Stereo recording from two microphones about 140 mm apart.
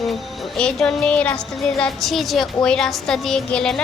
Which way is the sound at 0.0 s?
Centre (ahead or behind).